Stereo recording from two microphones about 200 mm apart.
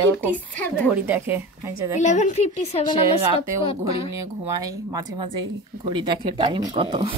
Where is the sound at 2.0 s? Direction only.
35° left (ahead or behind).